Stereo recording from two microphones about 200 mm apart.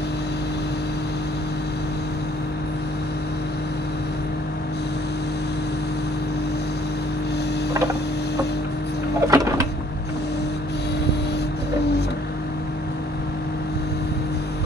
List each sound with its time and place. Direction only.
9.3 s printer: 15° right (ahead or behind)